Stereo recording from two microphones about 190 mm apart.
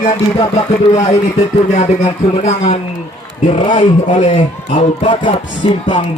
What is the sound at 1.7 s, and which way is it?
Speech, 35° left (ahead or behind).